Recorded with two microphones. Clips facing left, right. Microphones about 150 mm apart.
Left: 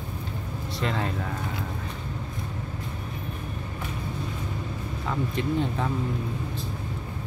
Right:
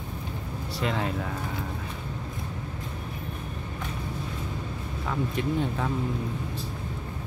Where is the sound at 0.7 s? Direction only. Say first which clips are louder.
Even; 10° right (ahead or behind).